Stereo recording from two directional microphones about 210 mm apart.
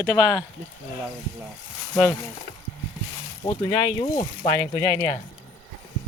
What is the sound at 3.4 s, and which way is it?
Speech, 30° left (ahead or behind).